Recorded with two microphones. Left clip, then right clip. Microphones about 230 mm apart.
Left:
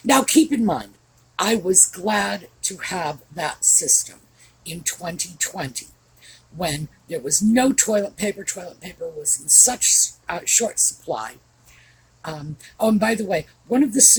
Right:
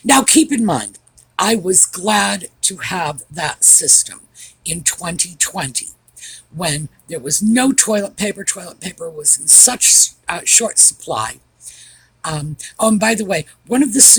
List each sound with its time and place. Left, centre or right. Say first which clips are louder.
0.0 s speech: right 4 dB; right